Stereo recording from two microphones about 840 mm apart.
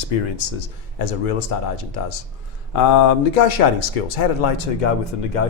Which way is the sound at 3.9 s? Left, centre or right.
Left.